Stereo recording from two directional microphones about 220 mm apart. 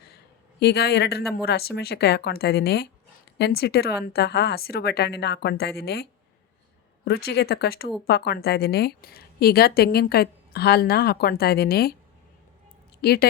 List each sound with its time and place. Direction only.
0.6 s a woman's voice: 45° left (ahead or behind)
13.0 s a woman's voice: 45° left (ahead or behind)